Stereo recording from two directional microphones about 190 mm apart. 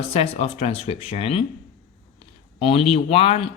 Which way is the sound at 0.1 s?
30° left (ahead or behind).